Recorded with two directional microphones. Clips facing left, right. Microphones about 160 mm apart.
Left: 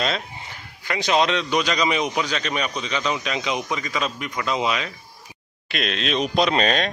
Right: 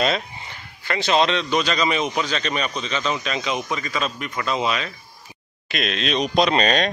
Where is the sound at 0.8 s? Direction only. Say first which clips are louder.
Right 1 dB; 10° left (ahead or behind).